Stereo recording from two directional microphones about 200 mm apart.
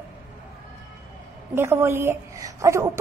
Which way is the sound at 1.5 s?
10° right (ahead or behind).